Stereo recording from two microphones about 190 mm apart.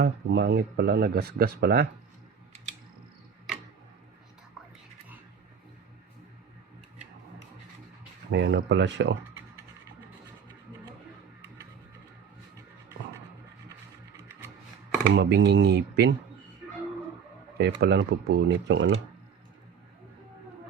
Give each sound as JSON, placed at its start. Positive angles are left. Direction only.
{"t": 0.0, "sound": "speech", "side_deg": -60}
{"t": 8.3, "sound": "speech", "side_deg": -70}
{"t": 15.1, "sound": "speech", "side_deg": -65}
{"t": 17.6, "sound": "speech", "side_deg": -60}